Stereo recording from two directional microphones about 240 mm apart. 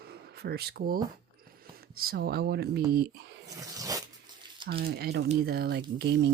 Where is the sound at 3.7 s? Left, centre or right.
Centre.